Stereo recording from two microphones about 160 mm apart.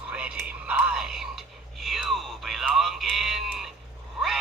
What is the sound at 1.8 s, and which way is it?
Music, centre (ahead or behind).